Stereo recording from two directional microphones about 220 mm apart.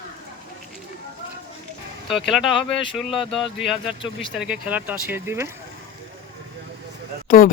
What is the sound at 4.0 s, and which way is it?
Speech, 20° left (ahead or behind).